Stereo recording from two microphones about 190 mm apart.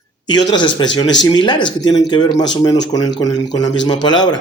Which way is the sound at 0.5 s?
25° left (ahead or behind).